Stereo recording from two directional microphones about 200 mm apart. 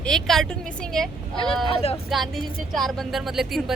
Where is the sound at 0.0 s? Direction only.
Centre (ahead or behind).